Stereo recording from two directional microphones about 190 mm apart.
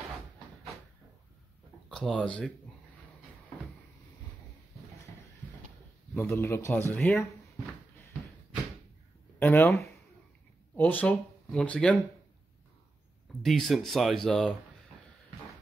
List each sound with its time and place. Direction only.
1.9 s speech: 5° left (ahead or behind)
6.1 s speech: 10° left (ahead or behind)
9.4 s speech: 15° left (ahead or behind)
13.4 s speech: centre (ahead or behind)